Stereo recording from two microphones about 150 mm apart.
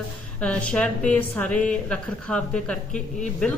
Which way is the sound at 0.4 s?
10° left (ahead or behind).